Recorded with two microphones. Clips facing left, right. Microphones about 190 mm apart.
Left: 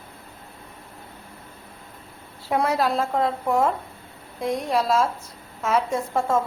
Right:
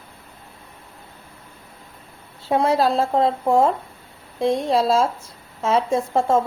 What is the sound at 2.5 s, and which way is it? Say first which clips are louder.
A woman's voice: right 4 dB; 25° right (ahead or behind).